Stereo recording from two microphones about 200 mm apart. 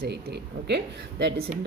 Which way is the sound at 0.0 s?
55° right (ahead or behind).